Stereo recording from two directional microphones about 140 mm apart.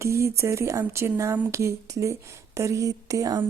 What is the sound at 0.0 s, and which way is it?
Speech, 20° right (ahead or behind).